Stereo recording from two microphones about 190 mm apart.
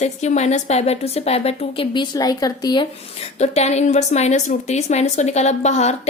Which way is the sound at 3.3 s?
35° left (ahead or behind).